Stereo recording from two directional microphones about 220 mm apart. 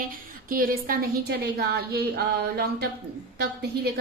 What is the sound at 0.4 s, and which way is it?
A woman's voice, 40° right (ahead or behind).